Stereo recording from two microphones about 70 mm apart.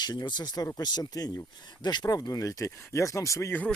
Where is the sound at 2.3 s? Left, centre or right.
Left.